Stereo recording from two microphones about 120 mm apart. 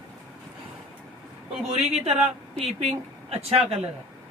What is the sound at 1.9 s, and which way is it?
Speech, 65° right (ahead or behind).